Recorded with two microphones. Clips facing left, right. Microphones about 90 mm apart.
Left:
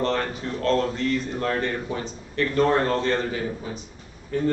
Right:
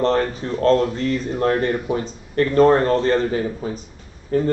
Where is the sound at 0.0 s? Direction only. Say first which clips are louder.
Right 6 dB; 35° right (ahead or behind).